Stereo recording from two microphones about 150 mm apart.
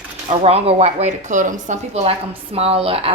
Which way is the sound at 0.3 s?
40° right (ahead or behind).